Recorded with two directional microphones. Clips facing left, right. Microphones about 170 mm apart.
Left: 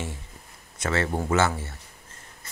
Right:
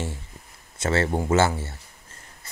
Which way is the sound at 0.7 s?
30° right (ahead or behind).